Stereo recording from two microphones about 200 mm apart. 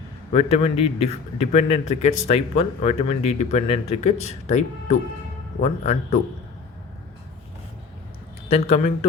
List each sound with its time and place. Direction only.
0.3 s a man's voice: 30° left (ahead or behind)
8.4 s a man's voice: 30° left (ahead or behind)